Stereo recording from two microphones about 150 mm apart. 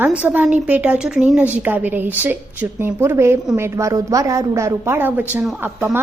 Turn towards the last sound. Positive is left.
turn(degrees=-20)  # may be behind; listen again after turning